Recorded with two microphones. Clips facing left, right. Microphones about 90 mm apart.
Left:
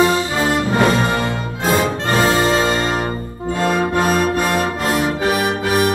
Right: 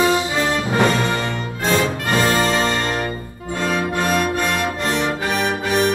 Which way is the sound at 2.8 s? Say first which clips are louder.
Left 3 dB; 30° left (ahead or behind).